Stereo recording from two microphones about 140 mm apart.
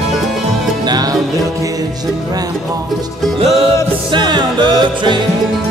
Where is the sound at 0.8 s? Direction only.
30° right (ahead or behind).